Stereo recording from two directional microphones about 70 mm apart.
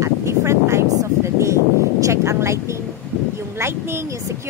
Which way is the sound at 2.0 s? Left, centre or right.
Right.